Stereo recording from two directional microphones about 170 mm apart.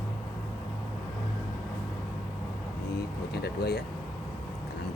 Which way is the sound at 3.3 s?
70° left (ahead or behind).